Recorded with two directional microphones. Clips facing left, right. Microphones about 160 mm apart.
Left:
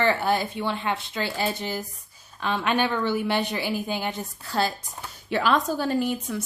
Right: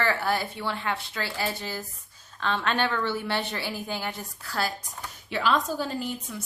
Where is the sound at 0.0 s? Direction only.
20° left (ahead or behind).